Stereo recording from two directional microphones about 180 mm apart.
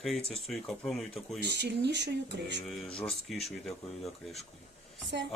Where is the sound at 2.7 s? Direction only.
5° left (ahead or behind).